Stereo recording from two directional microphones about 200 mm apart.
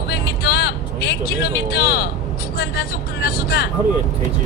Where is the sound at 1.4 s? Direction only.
50° left (ahead or behind).